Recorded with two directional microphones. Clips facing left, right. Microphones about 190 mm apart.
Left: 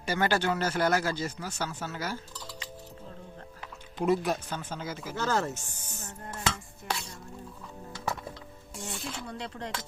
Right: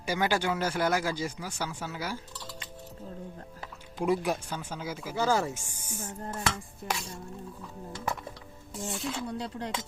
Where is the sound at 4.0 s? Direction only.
10° right (ahead or behind).